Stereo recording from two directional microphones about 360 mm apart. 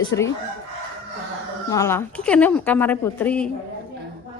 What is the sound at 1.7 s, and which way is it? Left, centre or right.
A woman's voice, centre.